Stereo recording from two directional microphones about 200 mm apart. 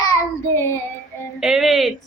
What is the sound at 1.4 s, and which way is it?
Speech, centre (ahead or behind).